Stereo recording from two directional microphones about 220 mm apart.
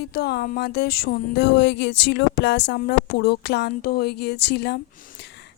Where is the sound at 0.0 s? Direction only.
45° left (ahead or behind).